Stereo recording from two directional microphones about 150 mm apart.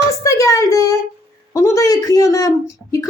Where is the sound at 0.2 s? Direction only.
20° left (ahead or behind).